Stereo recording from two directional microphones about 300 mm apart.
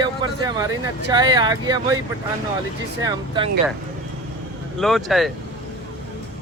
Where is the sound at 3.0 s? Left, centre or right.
Centre.